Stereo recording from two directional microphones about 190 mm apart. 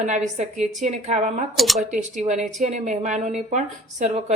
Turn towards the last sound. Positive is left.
turn(degrees=-40)  # may be behind; listen again after turning